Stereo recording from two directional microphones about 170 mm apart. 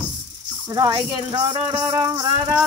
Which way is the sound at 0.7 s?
20° right (ahead or behind).